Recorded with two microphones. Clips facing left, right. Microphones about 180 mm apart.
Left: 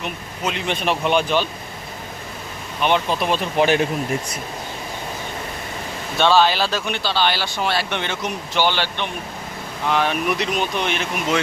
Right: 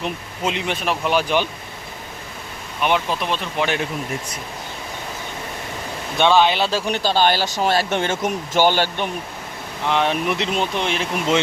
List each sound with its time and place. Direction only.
0.0 s speech: 25° right (ahead or behind)
0.7 s speech: 5° right (ahead or behind)
2.8 s speech: 5° right (ahead or behind)
3.2 s speech: 10° left (ahead or behind)
6.1 s speech: 15° right (ahead or behind); by 9.0 s 45° right (ahead or behind)
9.8 s speech: 25° right (ahead or behind)